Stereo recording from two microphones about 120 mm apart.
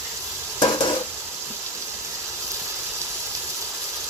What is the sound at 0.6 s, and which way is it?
Stir, 40° left (ahead or behind).